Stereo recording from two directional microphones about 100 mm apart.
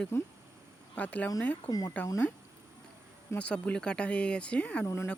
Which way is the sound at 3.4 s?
10° left (ahead or behind).